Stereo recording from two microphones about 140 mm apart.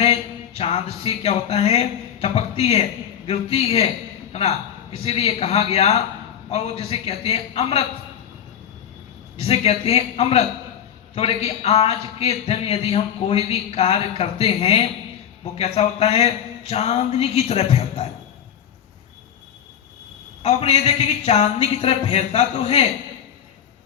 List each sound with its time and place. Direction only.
0.0 s a sound: 45° left (ahead or behind)
3.2 s a man's voice: 45° left (ahead or behind)
9.4 s a man's voice: 45° left (ahead or behind)
20.4 s a man's voice: 50° left (ahead or behind)